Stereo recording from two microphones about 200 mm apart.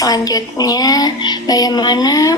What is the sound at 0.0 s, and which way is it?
A woman's voice, 20° left (ahead or behind).